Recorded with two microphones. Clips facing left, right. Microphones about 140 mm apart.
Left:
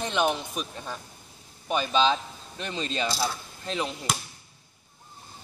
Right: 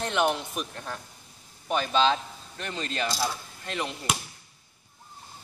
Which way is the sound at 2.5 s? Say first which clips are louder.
Left 2 dB; 20° left (ahead or behind).